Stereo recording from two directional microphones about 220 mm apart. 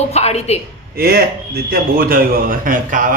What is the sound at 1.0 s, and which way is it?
A man's voice, 45° right (ahead or behind).